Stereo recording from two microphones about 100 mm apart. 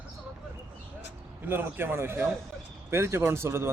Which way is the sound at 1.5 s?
20° right (ahead or behind).